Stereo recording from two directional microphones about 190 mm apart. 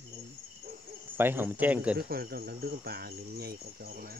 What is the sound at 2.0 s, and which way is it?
Speech, 55° right (ahead or behind).